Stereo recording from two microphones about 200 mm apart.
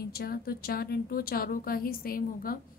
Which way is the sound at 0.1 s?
50° left (ahead or behind).